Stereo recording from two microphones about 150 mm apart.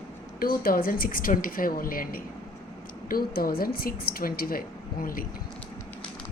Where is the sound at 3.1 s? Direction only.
85° left.